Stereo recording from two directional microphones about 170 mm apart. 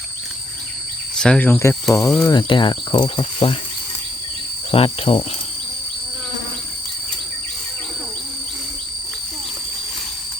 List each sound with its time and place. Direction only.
1.1 s speech: 5° left (ahead or behind)
2.2 s speech: 25° left (ahead or behind)
4.7 s insect: 35° left (ahead or behind)